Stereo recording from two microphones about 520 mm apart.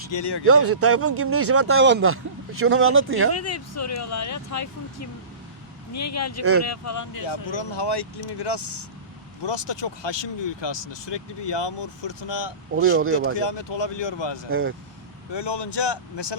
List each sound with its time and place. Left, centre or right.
0.1 s speech: left
0.4 s speech: right
3.3 s speech: left
7.3 s speech: left
12.7 s speech: right
13.3 s speech: left